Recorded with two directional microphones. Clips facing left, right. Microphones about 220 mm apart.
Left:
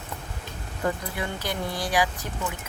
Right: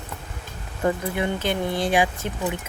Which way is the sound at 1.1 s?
25° right (ahead or behind).